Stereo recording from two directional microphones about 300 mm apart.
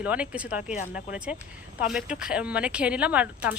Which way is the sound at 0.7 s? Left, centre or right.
Left.